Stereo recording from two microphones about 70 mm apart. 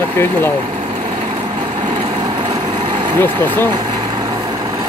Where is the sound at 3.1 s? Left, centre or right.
Left.